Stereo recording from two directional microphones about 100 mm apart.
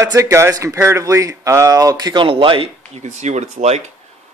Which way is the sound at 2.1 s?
55° right (ahead or behind).